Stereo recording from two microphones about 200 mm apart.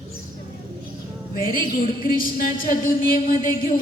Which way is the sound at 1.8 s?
45° left (ahead or behind).